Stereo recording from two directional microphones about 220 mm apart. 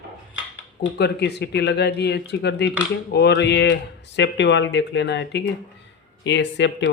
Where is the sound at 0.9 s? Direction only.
50° left (ahead or behind).